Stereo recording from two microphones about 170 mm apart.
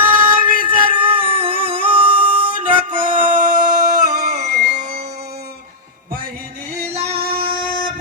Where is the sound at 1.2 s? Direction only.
35° right (ahead or behind).